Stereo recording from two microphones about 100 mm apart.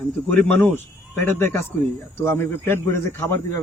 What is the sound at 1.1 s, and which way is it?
Speech, 20° left (ahead or behind).